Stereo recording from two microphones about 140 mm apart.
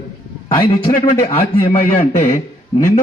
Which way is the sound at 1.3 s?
45° left (ahead or behind).